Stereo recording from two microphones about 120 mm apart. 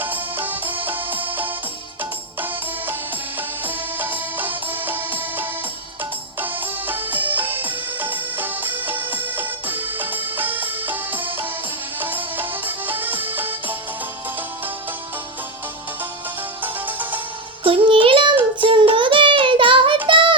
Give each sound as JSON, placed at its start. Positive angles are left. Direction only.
{"t": 0.0, "sound": "music", "side_deg": -15}
{"t": 3.3, "sound": "music", "side_deg": -15}
{"t": 16.6, "sound": "music", "side_deg": -15}
{"t": 17.6, "sound": "music", "side_deg": -45}
{"t": 18.6, "sound": "child singing", "side_deg": -45}
{"t": 20.1, "sound": "music", "side_deg": -45}